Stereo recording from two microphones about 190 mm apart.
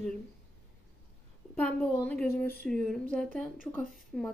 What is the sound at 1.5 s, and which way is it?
A woman's voice, 10° left (ahead or behind).